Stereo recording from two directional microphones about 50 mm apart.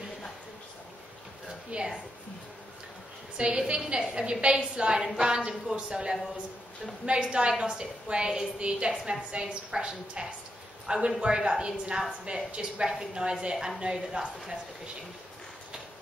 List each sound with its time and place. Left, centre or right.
1.7 s a woman's voice: centre
3.3 s a woman's voice: centre
8.9 s a woman's voice: centre